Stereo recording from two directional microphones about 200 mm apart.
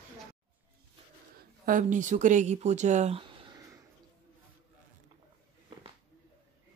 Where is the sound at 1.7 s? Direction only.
40° right (ahead or behind).